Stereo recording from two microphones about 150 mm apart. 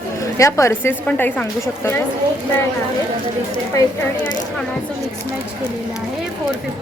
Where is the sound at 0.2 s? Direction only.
20° left (ahead or behind).